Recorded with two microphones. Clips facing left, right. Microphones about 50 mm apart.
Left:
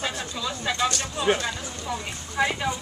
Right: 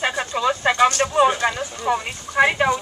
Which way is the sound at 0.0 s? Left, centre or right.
Right.